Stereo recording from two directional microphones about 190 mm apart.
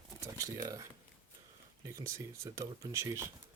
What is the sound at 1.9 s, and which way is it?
Speech, 15° right (ahead or behind).